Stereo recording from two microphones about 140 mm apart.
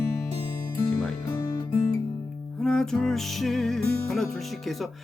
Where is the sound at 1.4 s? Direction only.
25° left (ahead or behind).